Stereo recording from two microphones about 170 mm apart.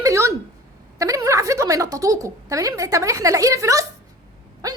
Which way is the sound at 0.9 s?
20° right (ahead or behind).